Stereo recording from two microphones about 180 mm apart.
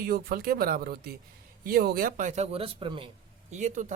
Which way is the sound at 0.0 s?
55° right (ahead or behind).